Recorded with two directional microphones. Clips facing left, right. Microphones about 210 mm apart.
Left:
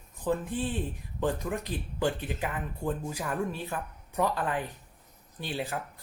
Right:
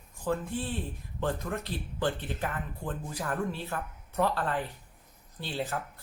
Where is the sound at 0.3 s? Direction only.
15° left (ahead or behind).